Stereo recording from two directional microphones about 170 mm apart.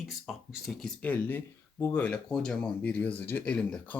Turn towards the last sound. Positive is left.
turn(degrees=5)  # may be behind; listen again after turning